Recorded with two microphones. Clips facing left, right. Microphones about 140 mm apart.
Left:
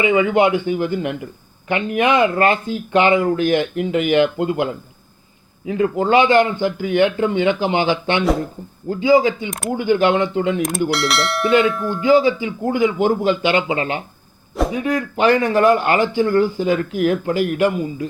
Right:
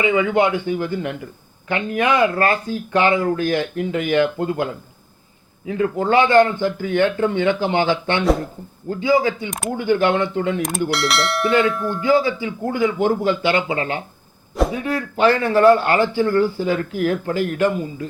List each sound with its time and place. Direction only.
0.0 s speech: 15° left (ahead or behind)
10.6 s speech: centre (ahead or behind)
11.9 s speech: 20° left (ahead or behind)